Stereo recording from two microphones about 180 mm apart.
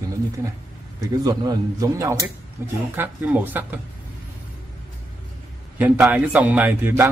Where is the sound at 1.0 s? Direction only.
20° right (ahead or behind).